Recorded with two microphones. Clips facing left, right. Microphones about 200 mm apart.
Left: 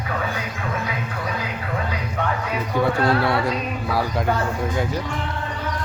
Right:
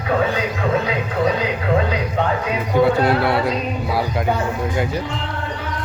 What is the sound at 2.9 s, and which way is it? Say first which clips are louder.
Speech: right 3 dB; 20° right (ahead or behind).